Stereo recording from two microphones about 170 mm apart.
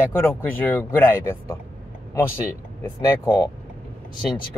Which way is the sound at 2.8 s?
10° left (ahead or behind).